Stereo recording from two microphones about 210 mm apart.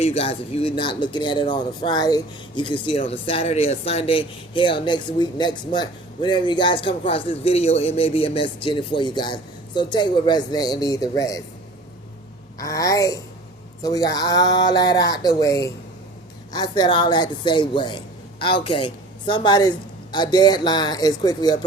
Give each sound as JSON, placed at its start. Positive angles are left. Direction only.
{"t": 0.0, "sound": "speech", "side_deg": 30}
{"t": 12.5, "sound": "speech", "side_deg": 15}